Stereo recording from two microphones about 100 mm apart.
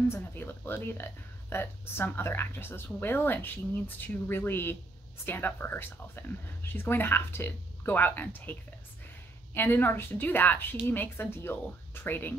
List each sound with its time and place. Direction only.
0.1 s speech: 20° left (ahead or behind)